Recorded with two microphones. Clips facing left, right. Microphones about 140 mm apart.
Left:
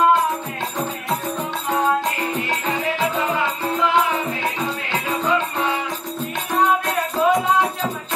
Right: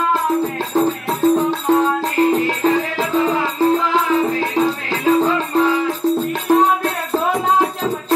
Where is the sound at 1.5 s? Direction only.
35° right (ahead or behind).